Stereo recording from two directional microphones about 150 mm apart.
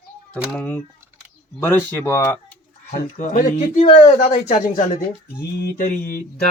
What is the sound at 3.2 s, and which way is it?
Speech, 55° left (ahead or behind).